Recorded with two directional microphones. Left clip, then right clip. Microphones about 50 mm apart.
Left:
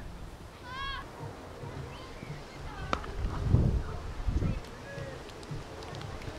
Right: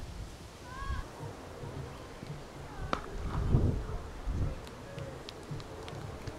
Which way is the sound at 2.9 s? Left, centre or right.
Centre.